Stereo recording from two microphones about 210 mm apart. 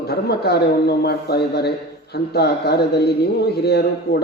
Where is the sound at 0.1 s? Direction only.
50° left (ahead or behind).